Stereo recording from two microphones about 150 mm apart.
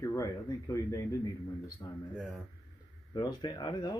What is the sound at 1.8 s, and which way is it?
Speech, 25° left (ahead or behind).